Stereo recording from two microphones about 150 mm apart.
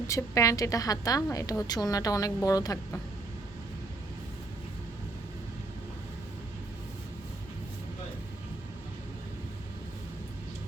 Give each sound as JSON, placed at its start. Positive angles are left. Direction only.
{"t": 0.1, "sound": "a woman's voice", "side_deg": 20}